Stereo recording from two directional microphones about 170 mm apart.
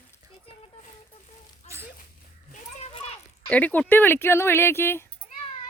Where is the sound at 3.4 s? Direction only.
10° left (ahead or behind).